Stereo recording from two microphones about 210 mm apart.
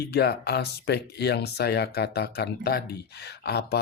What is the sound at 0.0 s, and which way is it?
Speech, 50° left (ahead or behind).